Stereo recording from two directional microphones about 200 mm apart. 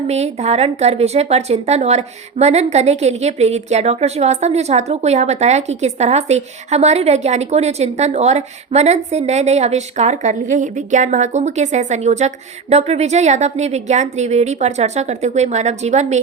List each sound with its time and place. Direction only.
0.1 s a woman's voice: 35° right (ahead or behind)